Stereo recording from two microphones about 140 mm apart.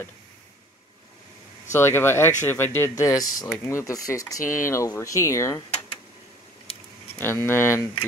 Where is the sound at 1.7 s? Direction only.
20° left (ahead or behind).